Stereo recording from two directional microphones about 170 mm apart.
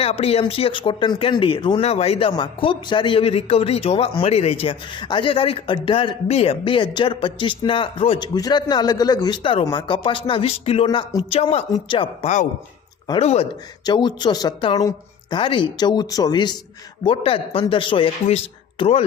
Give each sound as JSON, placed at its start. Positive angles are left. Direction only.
{"t": 0.0, "sound": "speech", "side_deg": 40}
{"t": 10.8, "sound": "speech", "side_deg": 20}
{"t": 11.3, "sound": "speech", "side_deg": 35}
{"t": 13.8, "sound": "speech", "side_deg": 25}